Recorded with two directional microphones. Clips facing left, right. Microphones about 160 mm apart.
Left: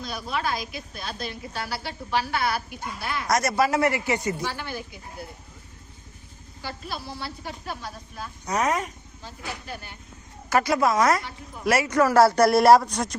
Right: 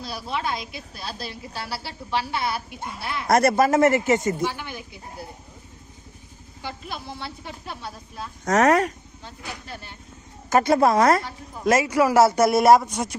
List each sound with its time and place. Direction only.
0.0 s a woman's voice: 30° right (ahead or behind)
3.2 s speech: 55° right (ahead or behind)
4.4 s speech: 15° right (ahead or behind)
6.6 s a woman's voice: 20° right (ahead or behind)
8.4 s speech: 85° right
10.5 s a woman's voice: 25° right (ahead or behind); by 13.1 s 5° right (ahead or behind)